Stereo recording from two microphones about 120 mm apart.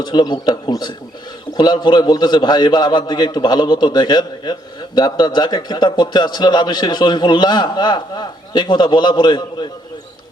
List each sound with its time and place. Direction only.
0.0 s a man's voice: 35° left (ahead or behind)